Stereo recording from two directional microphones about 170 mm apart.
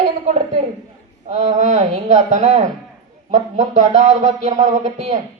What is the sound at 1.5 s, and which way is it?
A man's voice, 45° right (ahead or behind).